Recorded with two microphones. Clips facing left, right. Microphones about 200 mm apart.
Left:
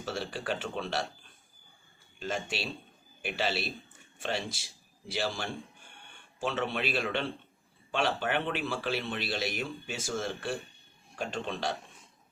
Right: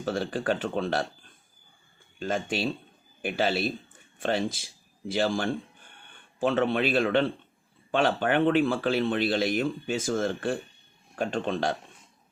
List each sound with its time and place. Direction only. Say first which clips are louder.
0.0 s speech: right 7 dB; 50° right (ahead or behind)
2.1 s a man's voice: right 6 dB; 50° right (ahead or behind)